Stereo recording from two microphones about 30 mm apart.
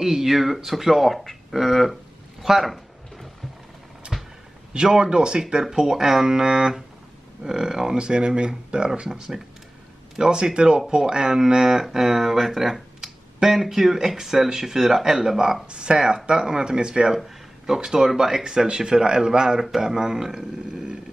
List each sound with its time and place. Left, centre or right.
0.0 s speech: centre
4.1 s a sound: centre
4.9 s a man's voice: right
5.7 s speech: centre
6.2 s a man's voice: right
10.3 s speech: right
15.7 s a man's voice: right
20.7 s vehicle: right